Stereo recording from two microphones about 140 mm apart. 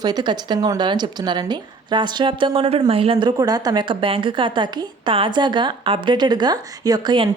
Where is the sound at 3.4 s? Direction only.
25° right (ahead or behind).